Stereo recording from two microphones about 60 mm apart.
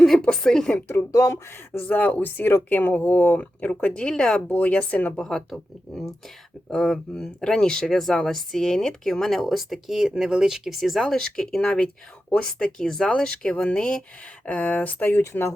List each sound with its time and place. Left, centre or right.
0.0 s a woman's voice: centre
1.1 s speech: left
1.8 s speech: left; by 4.4 s centre
4.4 s speech: left
5.1 s speech: centre
6.7 s speech: centre; by 15.1 s left
15.1 s speech: left